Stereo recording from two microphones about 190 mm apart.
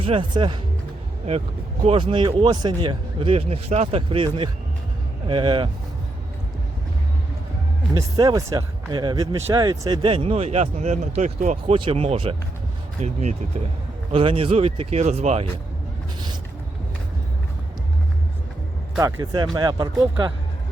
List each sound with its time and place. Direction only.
0.0 s speech: 25° right (ahead or behind)
1.8 s speech: 30° right (ahead or behind)
7.9 s speech: 20° right (ahead or behind); by 13.3 s 40° right (ahead or behind)
14.1 s speech: 30° right (ahead or behind)
18.9 s speech: 15° right (ahead or behind)